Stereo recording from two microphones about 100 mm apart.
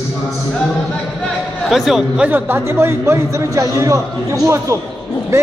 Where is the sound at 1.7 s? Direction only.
5° right (ahead or behind).